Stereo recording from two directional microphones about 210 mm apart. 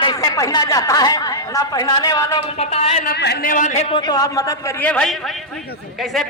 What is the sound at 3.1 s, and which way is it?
Speech, 50° left (ahead or behind).